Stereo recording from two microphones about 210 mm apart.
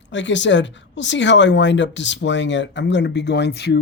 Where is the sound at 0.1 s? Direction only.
60° left (ahead or behind).